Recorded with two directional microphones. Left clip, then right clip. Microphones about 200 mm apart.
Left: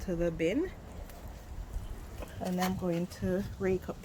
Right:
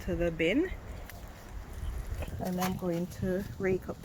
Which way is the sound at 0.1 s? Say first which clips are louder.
Right 2 dB; 5° left (ahead or behind).